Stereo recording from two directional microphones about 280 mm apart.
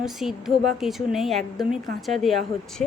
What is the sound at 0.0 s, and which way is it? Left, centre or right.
A woman's voice, centre.